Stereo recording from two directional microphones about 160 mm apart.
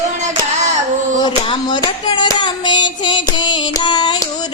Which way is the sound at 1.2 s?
25° left (ahead or behind).